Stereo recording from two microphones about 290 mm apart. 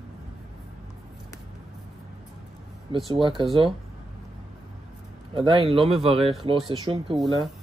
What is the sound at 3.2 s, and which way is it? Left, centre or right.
Speech, centre.